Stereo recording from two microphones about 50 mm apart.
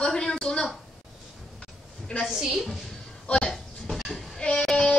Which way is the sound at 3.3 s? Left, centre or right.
Centre.